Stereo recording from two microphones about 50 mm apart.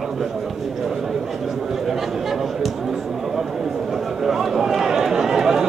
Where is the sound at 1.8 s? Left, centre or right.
Centre.